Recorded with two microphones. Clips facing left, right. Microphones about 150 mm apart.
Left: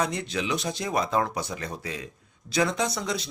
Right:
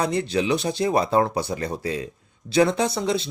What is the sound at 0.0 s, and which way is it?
Speech, 30° right (ahead or behind).